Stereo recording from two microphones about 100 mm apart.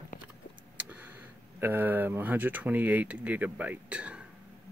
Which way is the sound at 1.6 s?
20° right (ahead or behind).